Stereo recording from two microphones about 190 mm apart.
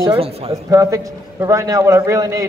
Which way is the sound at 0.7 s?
15° right (ahead or behind).